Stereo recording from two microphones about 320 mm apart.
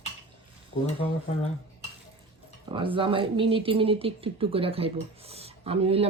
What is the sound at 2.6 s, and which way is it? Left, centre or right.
Speech, centre.